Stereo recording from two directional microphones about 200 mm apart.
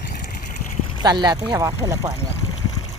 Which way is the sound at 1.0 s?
20° right (ahead or behind).